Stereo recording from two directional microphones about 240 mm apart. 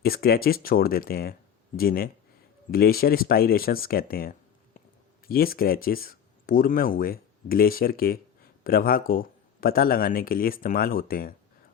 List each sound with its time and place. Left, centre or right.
0.0 s a man's voice: left